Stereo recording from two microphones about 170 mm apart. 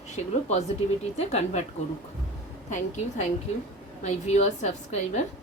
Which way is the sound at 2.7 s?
45° left (ahead or behind).